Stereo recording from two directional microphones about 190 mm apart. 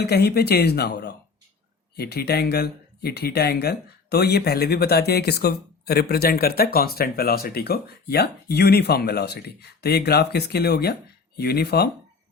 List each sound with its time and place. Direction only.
0.0 s speech: 55° left (ahead or behind)